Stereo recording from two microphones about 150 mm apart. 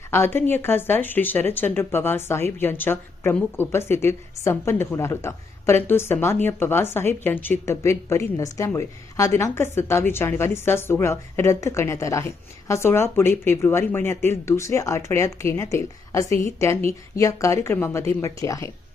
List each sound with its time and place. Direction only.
0.1 s a woman's voice: 15° left (ahead or behind)